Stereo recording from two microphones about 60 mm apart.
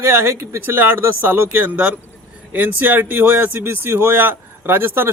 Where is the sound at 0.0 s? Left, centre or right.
Right.